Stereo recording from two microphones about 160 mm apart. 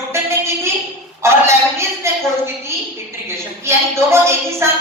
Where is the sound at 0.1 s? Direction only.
15° right (ahead or behind).